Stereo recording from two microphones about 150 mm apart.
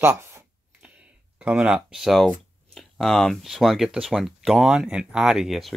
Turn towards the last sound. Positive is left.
turn(degrees=0)  # may be behind; listen again after turning